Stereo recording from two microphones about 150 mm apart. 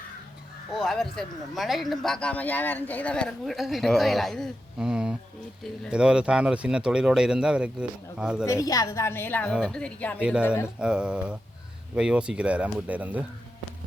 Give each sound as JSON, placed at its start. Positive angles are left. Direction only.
{"t": 0.7, "sound": "speech", "side_deg": 0}
{"t": 8.4, "sound": "a woman's voice", "side_deg": 25}
{"t": 10.8, "sound": "speech", "side_deg": -5}